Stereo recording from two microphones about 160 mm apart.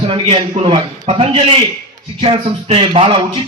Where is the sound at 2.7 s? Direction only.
35° right (ahead or behind).